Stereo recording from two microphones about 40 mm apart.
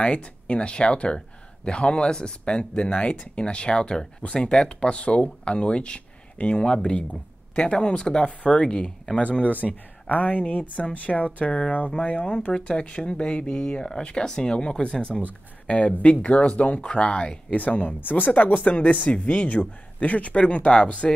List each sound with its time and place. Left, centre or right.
0.0 s speech: left
6.6 s speech: left
9.4 s speech: left
10.4 s speech: left
16.8 s speech: left
17.6 s speech: left